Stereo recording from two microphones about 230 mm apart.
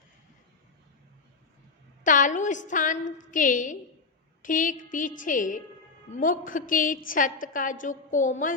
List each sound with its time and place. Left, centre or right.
2.0 s a woman's voice: left